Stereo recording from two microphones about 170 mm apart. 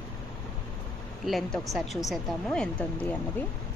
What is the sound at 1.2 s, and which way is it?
Speech, centre (ahead or behind).